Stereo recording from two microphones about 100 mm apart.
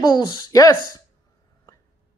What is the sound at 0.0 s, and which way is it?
Speech, 45° left (ahead or behind).